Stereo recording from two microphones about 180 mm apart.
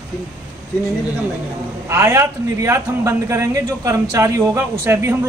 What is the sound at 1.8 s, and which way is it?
A man's voice, 15° right (ahead or behind).